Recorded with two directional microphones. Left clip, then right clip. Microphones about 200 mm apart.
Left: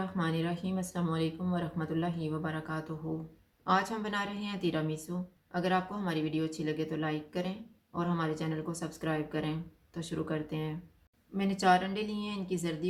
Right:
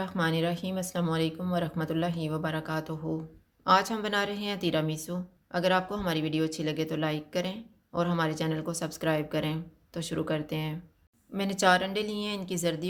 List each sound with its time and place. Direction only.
0.0 s speech: 45° right (ahead or behind)